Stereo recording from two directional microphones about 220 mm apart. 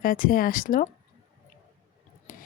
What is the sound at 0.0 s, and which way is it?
Speech, 40° left (ahead or behind).